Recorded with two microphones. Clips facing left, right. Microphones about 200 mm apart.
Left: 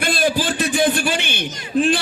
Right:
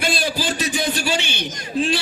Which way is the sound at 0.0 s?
50° left (ahead or behind).